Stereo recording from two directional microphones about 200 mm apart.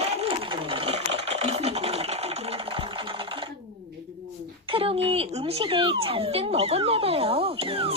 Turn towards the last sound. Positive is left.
turn(degrees=-25)  # may be behind; listen again after turning